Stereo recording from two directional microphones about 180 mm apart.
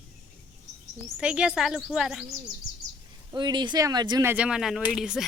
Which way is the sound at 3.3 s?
25° right (ahead or behind).